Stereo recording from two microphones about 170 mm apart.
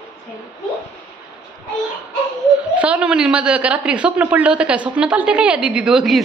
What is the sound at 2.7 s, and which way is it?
A woman's voice, 5° right (ahead or behind).